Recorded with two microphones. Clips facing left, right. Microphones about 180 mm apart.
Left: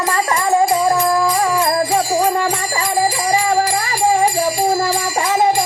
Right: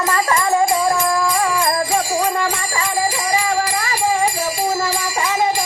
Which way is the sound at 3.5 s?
40° left (ahead or behind).